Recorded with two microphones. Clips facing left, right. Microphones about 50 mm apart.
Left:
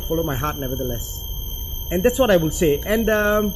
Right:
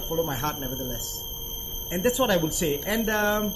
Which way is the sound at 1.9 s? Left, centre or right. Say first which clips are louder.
Left 7 dB; left.